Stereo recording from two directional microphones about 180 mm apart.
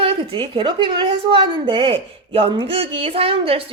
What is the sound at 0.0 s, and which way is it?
A woman's voice, 25° right (ahead or behind).